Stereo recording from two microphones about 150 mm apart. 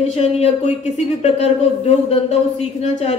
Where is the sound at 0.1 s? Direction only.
45° left (ahead or behind).